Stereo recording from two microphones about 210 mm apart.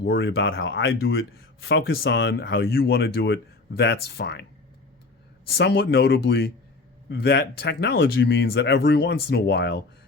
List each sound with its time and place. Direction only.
0.0 s speech: 55° left (ahead or behind)
5.5 s speech: 50° left (ahead or behind)